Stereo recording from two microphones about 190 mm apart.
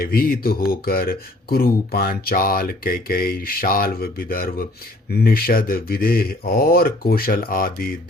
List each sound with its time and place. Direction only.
0.0 s speech: 50° left (ahead or behind)